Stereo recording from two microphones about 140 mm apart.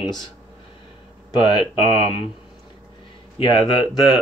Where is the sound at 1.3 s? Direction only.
30° left (ahead or behind).